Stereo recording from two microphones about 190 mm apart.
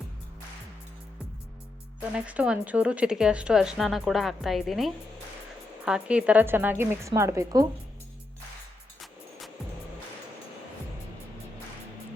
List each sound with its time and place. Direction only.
2.1 s speech: 5° right (ahead or behind)